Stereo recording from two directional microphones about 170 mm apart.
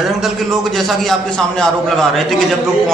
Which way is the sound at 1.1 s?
Centre (ahead or behind).